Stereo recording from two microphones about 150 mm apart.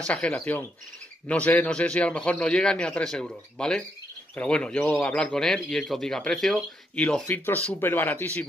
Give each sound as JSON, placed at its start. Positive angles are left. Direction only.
{"t": 0.0, "sound": "speech", "side_deg": 5}